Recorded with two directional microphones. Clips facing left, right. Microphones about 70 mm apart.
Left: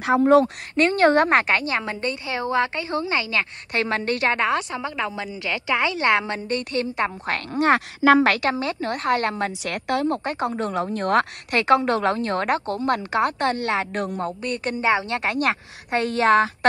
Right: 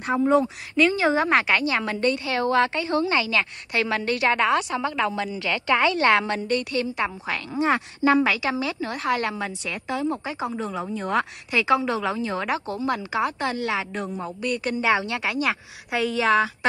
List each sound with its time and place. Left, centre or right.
0.7 s speech: left
1.9 s a woman's voice: left
8.3 s speech: left
9.6 s a woman's voice: left